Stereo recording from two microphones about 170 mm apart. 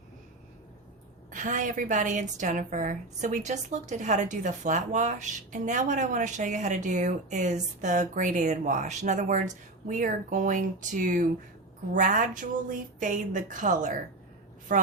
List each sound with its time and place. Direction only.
1.3 s a woman's voice: 50° right (ahead or behind)